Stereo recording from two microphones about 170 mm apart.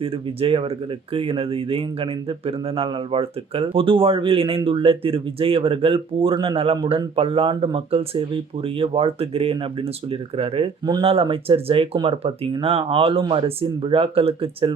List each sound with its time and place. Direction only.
0.0 s speech: 35° right (ahead or behind)